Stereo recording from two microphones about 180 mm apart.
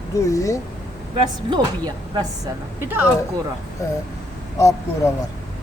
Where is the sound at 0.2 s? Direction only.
15° left (ahead or behind).